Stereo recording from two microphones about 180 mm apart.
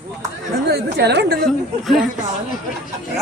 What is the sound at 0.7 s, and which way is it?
Speech, 65° right (ahead or behind).